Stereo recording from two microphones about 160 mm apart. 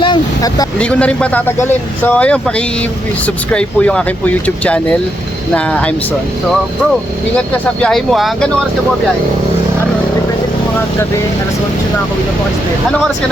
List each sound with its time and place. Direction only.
0.0 s vehicle: 25° left (ahead or behind)
0.8 s speech: 10° left (ahead or behind)
7.3 s speech: 5° left (ahead or behind)